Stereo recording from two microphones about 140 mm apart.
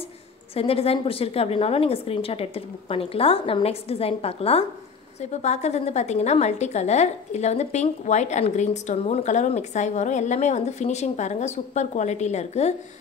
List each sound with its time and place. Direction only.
0.6 s a woman's voice: 45° left (ahead or behind)